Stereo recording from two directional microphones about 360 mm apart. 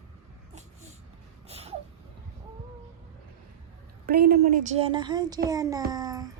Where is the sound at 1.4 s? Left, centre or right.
Centre.